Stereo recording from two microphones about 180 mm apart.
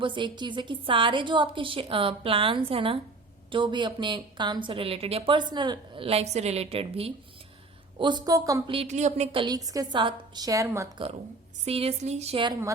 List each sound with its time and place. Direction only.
0.0 s a woman's voice: 25° right (ahead or behind)
8.7 s a woman's voice: 35° right (ahead or behind); by 11.0 s 15° right (ahead or behind)
11.6 s speech: 35° right (ahead or behind)